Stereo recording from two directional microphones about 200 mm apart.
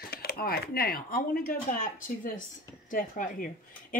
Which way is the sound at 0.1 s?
50° left (ahead or behind).